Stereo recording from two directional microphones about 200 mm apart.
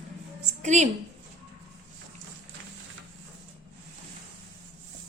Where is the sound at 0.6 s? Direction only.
35° right (ahead or behind).